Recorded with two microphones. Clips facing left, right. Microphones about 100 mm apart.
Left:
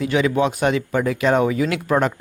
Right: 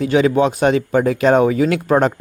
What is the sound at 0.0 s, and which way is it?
A man's voice, 35° right (ahead or behind).